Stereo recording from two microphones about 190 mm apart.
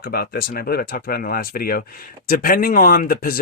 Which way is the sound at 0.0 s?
50° left (ahead or behind).